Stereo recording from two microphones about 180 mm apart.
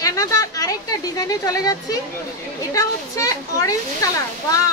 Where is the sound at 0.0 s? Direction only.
20° left (ahead or behind).